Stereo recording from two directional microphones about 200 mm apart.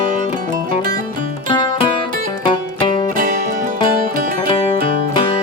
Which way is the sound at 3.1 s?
40° right (ahead or behind).